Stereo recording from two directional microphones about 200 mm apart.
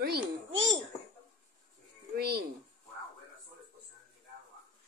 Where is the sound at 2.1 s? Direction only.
50° right (ahead or behind).